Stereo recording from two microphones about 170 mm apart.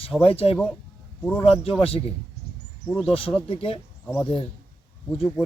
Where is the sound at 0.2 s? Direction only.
35° left (ahead or behind).